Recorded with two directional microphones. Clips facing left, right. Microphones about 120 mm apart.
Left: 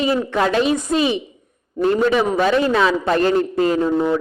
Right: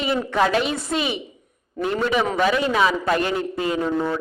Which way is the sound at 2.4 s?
35° left (ahead or behind).